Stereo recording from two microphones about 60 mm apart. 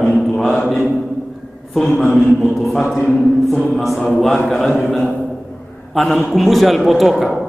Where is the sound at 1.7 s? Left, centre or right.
Centre.